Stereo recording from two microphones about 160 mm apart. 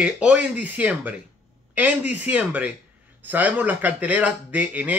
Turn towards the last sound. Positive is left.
turn(degrees=-10)  # may be behind; listen again after turning